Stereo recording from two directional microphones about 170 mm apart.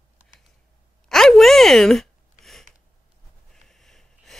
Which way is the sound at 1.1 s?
Centre (ahead or behind).